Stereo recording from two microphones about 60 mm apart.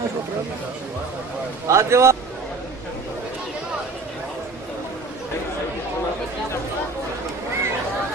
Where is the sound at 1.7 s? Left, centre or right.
Right.